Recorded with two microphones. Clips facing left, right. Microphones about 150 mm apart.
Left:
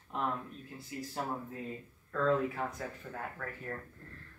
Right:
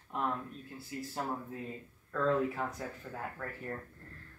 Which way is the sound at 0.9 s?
10° left (ahead or behind).